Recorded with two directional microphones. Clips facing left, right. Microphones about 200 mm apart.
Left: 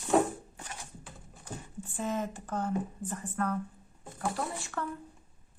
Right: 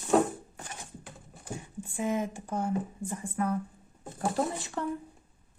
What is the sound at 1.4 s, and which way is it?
Speech, 10° right (ahead or behind).